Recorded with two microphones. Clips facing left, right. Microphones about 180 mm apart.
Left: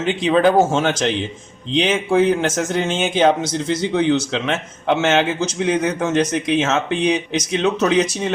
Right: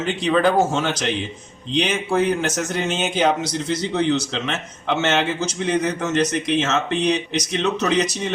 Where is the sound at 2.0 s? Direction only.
50° left (ahead or behind).